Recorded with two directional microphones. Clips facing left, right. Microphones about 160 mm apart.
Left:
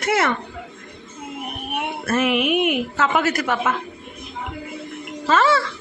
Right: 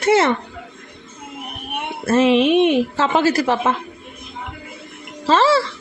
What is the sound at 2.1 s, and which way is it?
A woman's voice, 25° right (ahead or behind).